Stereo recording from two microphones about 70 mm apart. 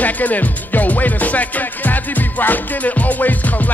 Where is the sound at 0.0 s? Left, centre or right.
Left.